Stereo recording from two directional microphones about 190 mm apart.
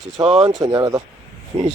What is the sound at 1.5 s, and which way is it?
Speech, 35° right (ahead or behind).